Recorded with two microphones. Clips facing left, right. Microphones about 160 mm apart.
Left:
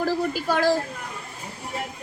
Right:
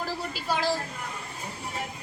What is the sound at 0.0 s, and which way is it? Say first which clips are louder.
Speech: left 9 dB; 45° left (ahead or behind).